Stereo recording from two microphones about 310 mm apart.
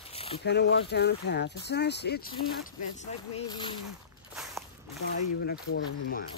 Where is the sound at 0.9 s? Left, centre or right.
Left.